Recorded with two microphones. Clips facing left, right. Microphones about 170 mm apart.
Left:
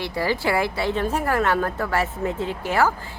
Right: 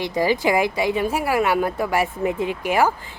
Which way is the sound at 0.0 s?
15° right (ahead or behind).